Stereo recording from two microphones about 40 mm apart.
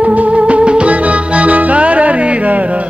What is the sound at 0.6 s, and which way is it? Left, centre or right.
Music, right.